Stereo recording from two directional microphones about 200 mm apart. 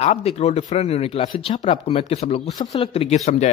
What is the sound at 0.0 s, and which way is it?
A man's voice, 30° left (ahead or behind).